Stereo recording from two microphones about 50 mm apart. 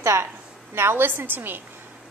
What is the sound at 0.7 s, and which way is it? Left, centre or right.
Speech, right.